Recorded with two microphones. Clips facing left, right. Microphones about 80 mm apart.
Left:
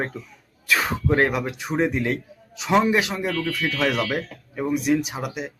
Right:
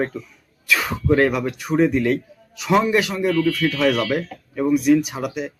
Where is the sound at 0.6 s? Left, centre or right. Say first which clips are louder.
Right 1 dB; left.